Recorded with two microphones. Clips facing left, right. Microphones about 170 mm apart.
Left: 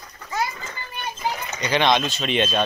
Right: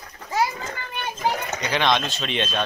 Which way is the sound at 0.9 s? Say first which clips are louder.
Right 2 dB; 60° right (ahead or behind).